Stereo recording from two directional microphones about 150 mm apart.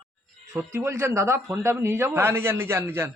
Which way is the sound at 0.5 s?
15° right (ahead or behind).